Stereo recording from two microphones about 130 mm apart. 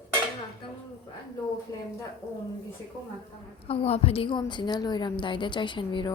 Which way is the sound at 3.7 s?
50° left (ahead or behind).